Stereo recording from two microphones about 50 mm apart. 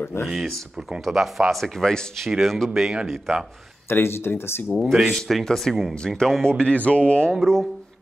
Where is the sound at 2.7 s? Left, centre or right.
Centre.